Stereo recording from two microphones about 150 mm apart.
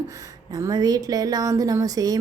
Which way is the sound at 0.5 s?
25° right (ahead or behind).